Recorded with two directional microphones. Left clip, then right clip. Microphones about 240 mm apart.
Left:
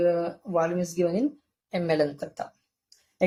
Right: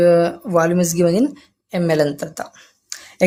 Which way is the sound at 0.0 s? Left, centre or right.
Right.